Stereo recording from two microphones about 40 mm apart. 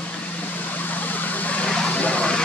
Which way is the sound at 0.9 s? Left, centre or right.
Left.